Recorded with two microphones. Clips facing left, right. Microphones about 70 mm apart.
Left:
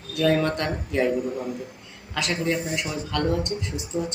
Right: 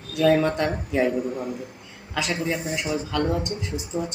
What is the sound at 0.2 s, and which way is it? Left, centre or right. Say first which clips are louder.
Speech: right 2 dB; centre.